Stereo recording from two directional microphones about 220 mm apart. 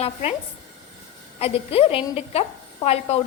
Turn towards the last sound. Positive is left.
turn(degrees=30)  # may be behind; listen again after turning